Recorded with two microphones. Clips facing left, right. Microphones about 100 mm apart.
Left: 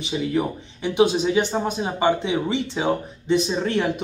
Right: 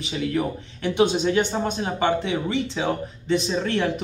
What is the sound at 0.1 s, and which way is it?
Speech, 15° left (ahead or behind).